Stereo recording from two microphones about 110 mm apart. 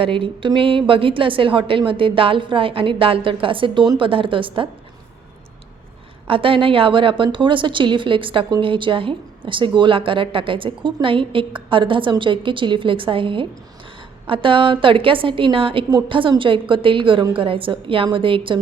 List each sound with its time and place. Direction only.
0.0 s a woman's voice: 55° right (ahead or behind)
6.2 s a woman's voice: 55° right (ahead or behind)